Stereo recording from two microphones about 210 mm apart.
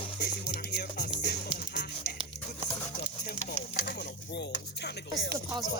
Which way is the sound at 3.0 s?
45° left (ahead or behind).